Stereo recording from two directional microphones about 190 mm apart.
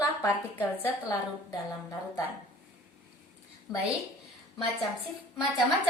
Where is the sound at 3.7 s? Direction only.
20° left (ahead or behind).